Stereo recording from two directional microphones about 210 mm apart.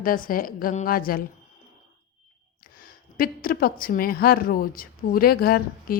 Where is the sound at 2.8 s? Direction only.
45° left (ahead or behind).